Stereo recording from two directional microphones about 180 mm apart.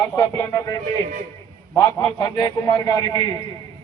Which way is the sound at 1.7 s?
15° left (ahead or behind).